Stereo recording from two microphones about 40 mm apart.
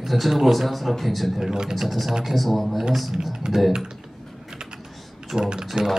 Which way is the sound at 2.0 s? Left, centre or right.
Centre.